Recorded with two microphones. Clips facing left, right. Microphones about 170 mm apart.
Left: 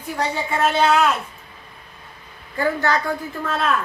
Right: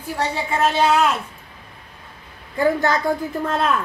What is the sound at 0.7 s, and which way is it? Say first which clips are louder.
Speech: left 1 dB; 10° right (ahead or behind).